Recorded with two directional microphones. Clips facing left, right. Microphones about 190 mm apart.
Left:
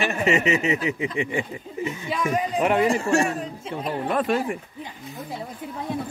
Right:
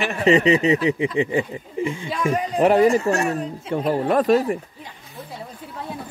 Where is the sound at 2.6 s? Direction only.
35° right (ahead or behind).